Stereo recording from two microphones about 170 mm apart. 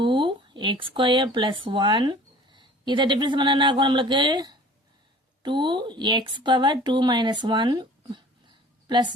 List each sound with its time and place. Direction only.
0.0 s speech: 30° right (ahead or behind)